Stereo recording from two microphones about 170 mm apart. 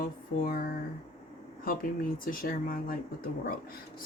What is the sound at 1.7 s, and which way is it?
Speech, 55° left (ahead or behind).